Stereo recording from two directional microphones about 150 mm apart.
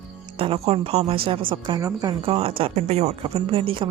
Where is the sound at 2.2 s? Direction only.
40° right (ahead or behind).